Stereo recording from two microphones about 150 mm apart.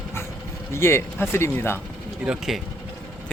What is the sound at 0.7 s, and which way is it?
Speech, 15° left (ahead or behind).